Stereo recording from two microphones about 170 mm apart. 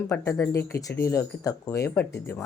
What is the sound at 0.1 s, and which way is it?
Speech, 15° left (ahead or behind).